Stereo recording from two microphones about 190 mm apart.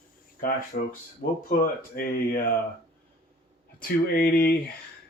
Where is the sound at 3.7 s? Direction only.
50° left (ahead or behind).